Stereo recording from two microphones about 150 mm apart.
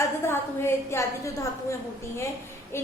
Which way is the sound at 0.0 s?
15° left (ahead or behind).